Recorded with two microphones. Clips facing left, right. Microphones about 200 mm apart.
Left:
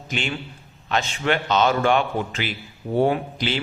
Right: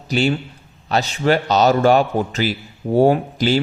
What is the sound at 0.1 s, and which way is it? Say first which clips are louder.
A man's voice: right 10 dB; 40° right (ahead or behind).